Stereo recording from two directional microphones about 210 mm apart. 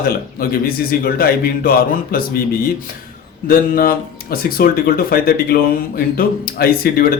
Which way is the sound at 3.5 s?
45° left (ahead or behind).